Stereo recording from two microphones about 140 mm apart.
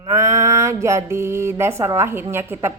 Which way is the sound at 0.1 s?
20° right (ahead or behind).